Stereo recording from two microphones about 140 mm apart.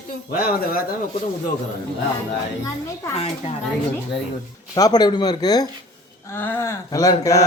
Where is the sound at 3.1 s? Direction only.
45° left (ahead or behind).